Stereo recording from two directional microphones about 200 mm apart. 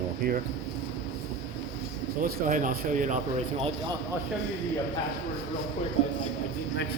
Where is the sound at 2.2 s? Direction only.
40° right (ahead or behind).